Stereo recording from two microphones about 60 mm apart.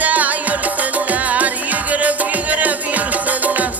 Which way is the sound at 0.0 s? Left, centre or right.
Right.